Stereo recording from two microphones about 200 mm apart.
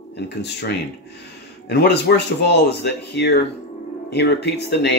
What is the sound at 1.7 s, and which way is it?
Speech, 55° left (ahead or behind).